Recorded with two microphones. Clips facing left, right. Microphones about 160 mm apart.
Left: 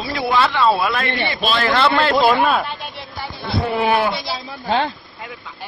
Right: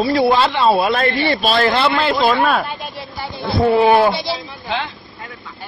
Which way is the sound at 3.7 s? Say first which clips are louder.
Right 6 dB; 25° right (ahead or behind).